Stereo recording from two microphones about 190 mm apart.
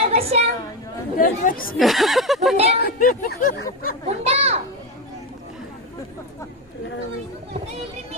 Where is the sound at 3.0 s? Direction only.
45° left (ahead or behind).